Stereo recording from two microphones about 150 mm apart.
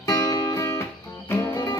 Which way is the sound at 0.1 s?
20° left (ahead or behind).